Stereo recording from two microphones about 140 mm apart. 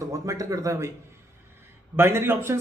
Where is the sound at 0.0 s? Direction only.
25° right (ahead or behind).